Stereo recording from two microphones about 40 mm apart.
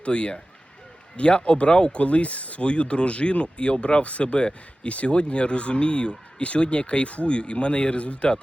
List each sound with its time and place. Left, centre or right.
0.0 s speech: left